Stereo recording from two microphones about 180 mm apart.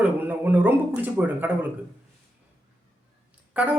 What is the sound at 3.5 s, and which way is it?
Speech, 10° right (ahead or behind).